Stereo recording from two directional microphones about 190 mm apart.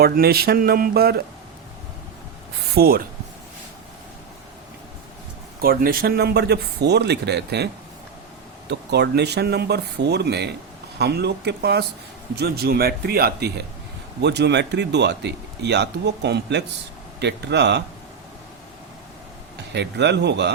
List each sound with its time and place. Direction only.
0.0 s speech: 55° right (ahead or behind)
2.7 s speech: 50° right (ahead or behind)
5.5 s speech: 50° right (ahead or behind)
8.7 s speech: 60° right (ahead or behind)
19.7 s speech: 65° right (ahead or behind)